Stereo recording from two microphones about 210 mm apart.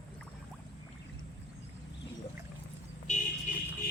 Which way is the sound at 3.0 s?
40° left (ahead or behind).